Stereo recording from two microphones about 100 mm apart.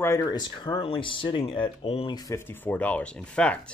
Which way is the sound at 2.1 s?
35° left (ahead or behind).